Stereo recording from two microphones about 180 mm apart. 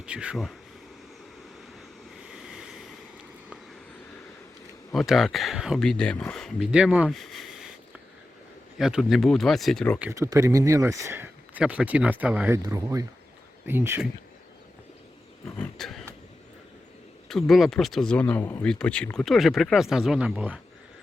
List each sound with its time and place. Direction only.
0.0 s speech: 5° right (ahead or behind)
2.2 s vehicle: 5° right (ahead or behind)
4.9 s speech: centre (ahead or behind)
8.8 s speech: centre (ahead or behind)
10.0 s speech: 15° right (ahead or behind)
12.6 s speech: 20° right (ahead or behind)
15.5 s speech: 5° left (ahead or behind)
17.2 s speech: centre (ahead or behind)